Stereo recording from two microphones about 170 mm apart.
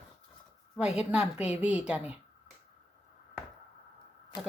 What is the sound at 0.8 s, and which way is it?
A woman's voice, 5° right (ahead or behind).